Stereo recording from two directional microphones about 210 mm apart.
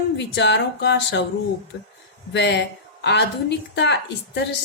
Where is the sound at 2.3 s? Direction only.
55° left (ahead or behind).